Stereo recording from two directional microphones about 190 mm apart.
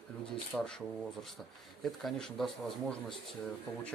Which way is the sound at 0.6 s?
5° left (ahead or behind).